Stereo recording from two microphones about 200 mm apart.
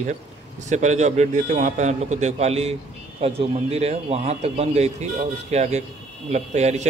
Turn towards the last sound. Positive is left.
turn(degrees=-35)  # may be behind; listen again after turning